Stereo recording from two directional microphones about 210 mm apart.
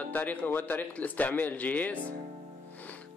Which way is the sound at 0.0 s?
5° left (ahead or behind).